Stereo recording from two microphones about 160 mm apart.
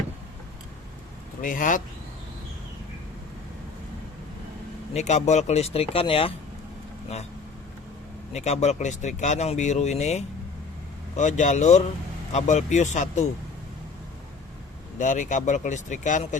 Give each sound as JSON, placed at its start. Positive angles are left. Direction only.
{"t": 1.4, "sound": "speech", "side_deg": 55}
{"t": 4.9, "sound": "speech", "side_deg": 45}
{"t": 8.3, "sound": "speech", "side_deg": 45}
{"t": 14.9, "sound": "speech", "side_deg": 50}